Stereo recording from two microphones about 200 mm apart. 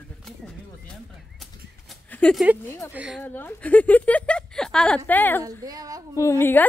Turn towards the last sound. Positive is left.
turn(degrees=10)  # may be behind; listen again after turning